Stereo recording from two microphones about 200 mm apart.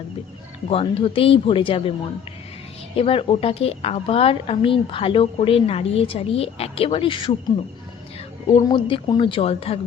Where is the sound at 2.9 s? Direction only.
25° left (ahead or behind).